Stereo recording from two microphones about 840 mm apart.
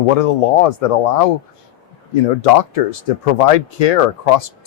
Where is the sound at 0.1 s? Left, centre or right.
Left.